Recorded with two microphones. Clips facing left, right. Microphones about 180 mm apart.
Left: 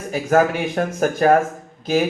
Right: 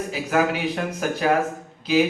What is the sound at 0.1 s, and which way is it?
Speech, 50° left (ahead or behind).